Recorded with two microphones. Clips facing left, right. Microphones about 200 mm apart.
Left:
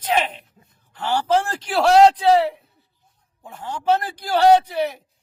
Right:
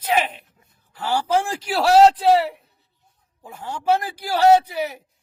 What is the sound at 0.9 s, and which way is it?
A man's voice, 10° right (ahead or behind).